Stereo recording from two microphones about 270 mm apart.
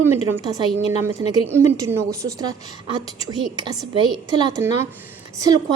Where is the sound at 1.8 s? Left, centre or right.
Centre.